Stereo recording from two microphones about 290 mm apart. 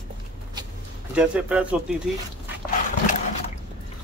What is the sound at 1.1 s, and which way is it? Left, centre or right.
Speech, centre.